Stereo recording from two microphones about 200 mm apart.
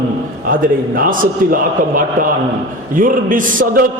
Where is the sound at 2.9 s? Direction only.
40° right (ahead or behind).